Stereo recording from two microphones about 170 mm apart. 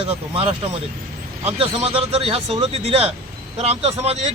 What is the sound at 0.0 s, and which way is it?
Speech, 35° right (ahead or behind).